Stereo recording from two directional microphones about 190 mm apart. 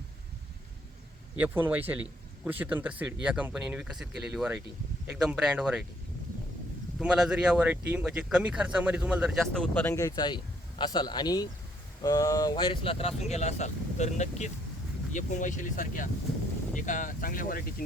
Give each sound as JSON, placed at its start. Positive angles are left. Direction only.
{"t": 1.4, "sound": "speech", "side_deg": -10}
{"t": 7.0, "sound": "speech", "side_deg": -5}
{"t": 9.7, "sound": "a man's voice", "side_deg": 10}